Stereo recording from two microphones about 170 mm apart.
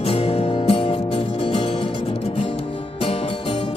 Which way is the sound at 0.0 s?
35° left (ahead or behind).